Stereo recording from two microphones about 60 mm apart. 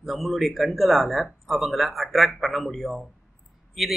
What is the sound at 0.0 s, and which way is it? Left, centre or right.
Speech, centre.